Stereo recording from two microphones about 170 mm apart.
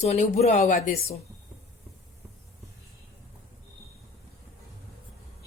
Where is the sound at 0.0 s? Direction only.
40° left (ahead or behind).